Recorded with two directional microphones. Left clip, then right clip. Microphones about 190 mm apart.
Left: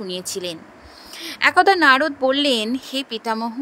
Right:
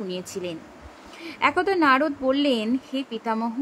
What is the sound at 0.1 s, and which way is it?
Speech, 40° left (ahead or behind).